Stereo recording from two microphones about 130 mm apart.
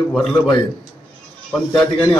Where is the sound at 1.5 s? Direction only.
5° left (ahead or behind).